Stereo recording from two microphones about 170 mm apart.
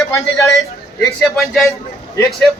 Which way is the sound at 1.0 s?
Centre (ahead or behind).